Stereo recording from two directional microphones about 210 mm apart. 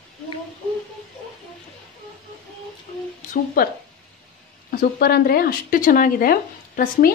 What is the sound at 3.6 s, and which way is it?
Speech, 45° left (ahead or behind).